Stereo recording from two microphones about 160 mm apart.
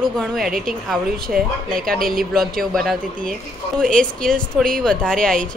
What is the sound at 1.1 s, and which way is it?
Speech, 70° right (ahead or behind).